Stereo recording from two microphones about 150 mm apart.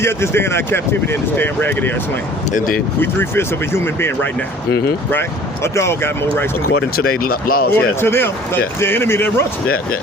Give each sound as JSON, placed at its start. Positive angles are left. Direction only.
{"t": 0.0, "sound": "speech", "side_deg": 15}
{"t": 3.0, "sound": "speech", "side_deg": 15}
{"t": 5.6, "sound": "speech", "side_deg": 20}
{"t": 6.7, "sound": "speech", "side_deg": 90}
{"t": 8.0, "sound": "speech", "side_deg": 15}
{"t": 9.6, "sound": "speech", "side_deg": 80}